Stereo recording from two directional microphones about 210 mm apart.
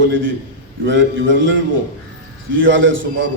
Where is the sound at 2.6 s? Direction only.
65° right (ahead or behind).